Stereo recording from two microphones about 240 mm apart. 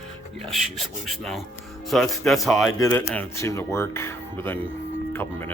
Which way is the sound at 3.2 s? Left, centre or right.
Centre.